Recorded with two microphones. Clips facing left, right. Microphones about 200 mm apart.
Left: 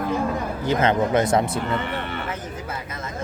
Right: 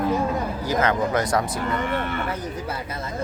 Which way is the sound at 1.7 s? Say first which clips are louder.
Right 2 dB; 45° right (ahead or behind).